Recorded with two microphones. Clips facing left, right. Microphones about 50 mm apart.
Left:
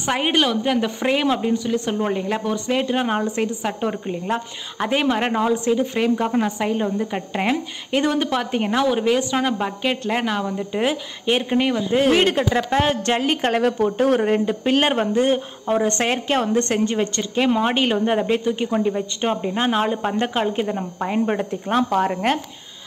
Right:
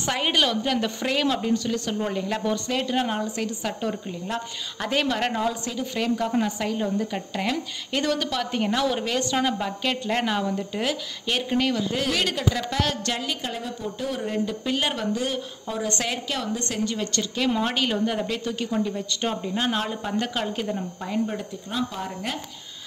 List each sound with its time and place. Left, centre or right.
0.0 s a woman's voice: left
10.7 s a woman's voice: left
21.3 s speech: left